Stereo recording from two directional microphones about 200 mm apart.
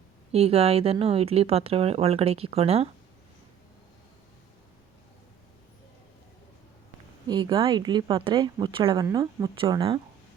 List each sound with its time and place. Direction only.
0.3 s speech: 30° right (ahead or behind)
7.3 s speech: 20° right (ahead or behind)